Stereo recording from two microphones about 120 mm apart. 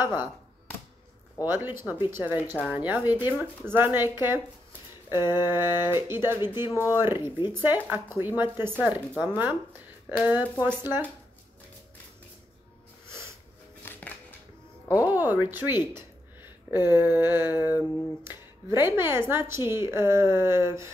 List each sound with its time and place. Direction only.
1.4 s speech: 20° right (ahead or behind)
6.7 s speech: 25° left (ahead or behind)
7.0 s speech: 20° right (ahead or behind)
13.0 s snort: 25° right (ahead or behind)
13.8 s a sound: 15° left (ahead or behind)
15.0 s speech: 15° right (ahead or behind)